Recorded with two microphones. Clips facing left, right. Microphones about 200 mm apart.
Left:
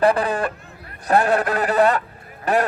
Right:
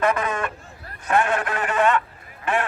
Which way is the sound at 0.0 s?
35° left (ahead or behind).